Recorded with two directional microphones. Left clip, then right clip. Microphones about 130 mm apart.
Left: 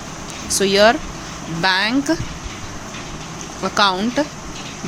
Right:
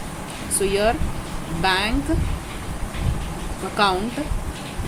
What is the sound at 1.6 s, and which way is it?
Speech, 70° left (ahead or behind).